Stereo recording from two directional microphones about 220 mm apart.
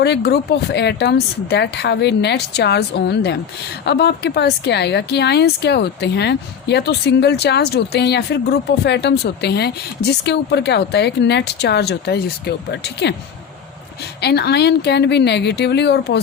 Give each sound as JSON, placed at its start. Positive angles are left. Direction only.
{"t": 0.0, "sound": "speech", "side_deg": 50}